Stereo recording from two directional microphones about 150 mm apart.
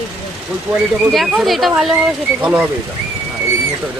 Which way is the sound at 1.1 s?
Centre (ahead or behind).